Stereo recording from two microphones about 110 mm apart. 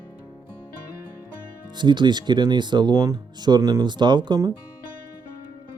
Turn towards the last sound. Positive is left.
turn(degrees=-40)  # may be behind; listen again after turning